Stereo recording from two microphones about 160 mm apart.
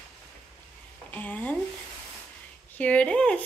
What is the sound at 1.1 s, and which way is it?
Speech, 10° left (ahead or behind).